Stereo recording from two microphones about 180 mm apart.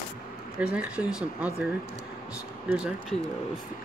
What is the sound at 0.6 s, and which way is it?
Speech, 5° right (ahead or behind).